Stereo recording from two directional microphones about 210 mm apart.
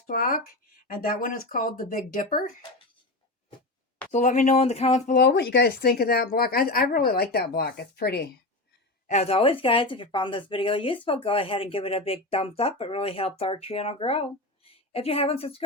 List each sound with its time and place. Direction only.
0.1 s a woman's voice: 40° left (ahead or behind)
4.1 s speech: 35° left (ahead or behind)
5.2 s a woman's voice: 55° left (ahead or behind)
9.0 s a woman's voice: 30° left (ahead or behind)